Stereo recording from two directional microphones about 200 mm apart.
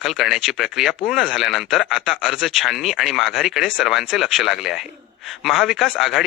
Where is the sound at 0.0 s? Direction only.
Centre (ahead or behind).